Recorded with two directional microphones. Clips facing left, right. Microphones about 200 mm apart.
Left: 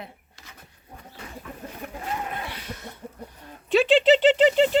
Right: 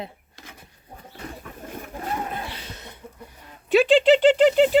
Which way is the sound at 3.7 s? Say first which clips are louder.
Right 2 dB; centre (ahead or behind).